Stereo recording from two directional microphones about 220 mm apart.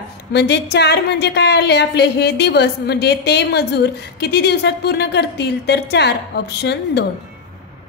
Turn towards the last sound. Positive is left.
turn(degrees=50)  # may be behind; listen again after turning